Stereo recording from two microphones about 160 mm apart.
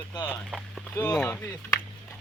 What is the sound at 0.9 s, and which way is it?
Speech, 15° left (ahead or behind).